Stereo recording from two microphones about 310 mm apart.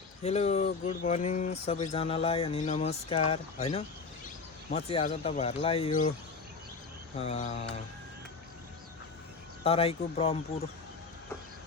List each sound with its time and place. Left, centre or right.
0.2 s speech: left
7.2 s speech: centre
9.6 s speech: centre